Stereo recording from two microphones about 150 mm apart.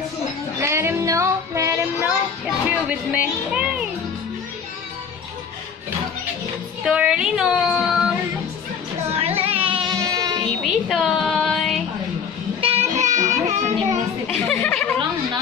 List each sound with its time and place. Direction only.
0.6 s music: 20° right (ahead or behind)
2.0 s music: 5° right (ahead or behind)
6.8 s child singing: 5° right (ahead or behind)
9.1 s music: 40° right (ahead or behind); by 10.4 s 25° right (ahead or behind)
10.6 s music: centre (ahead or behind)
12.5 s music: 40° right (ahead or behind)
12.9 s music: 55° right (ahead or behind)
14.2 s a sound: 10° left (ahead or behind)